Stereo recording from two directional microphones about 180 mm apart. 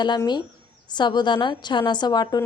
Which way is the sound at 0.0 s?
25° left (ahead or behind).